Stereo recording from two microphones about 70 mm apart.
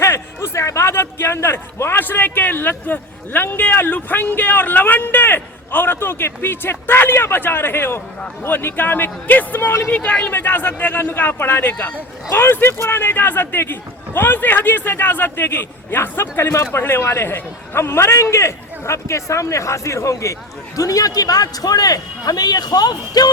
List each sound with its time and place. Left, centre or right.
0.0 s a man's voice: left
20.7 s a man's voice: left